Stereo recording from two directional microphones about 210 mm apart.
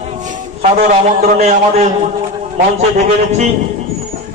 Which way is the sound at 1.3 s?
35° right (ahead or behind).